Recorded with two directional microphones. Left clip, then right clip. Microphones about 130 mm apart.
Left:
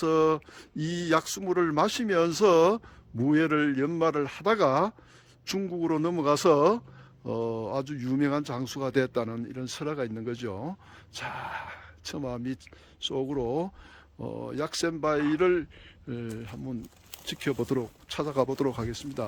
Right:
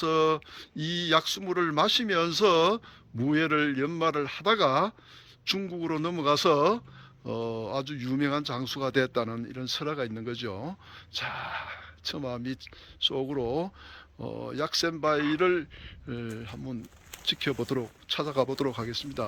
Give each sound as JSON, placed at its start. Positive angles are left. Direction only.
{"t": 0.0, "sound": "speech", "side_deg": 35}